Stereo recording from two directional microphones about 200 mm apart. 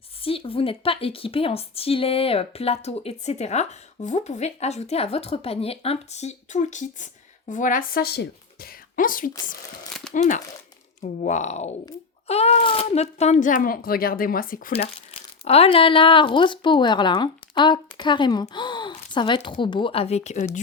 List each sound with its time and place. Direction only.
0.2 s a woman's voice: 30° left (ahead or behind); by 14.7 s 45° left (ahead or behind)
15.4 s speech: 30° left (ahead or behind)